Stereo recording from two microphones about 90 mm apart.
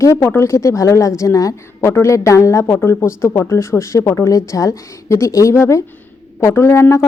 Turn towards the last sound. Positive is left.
turn(degrees=30)  # may be behind; listen again after turning